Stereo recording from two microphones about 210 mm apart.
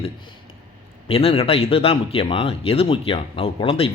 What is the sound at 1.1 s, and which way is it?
Speech, 30° left (ahead or behind).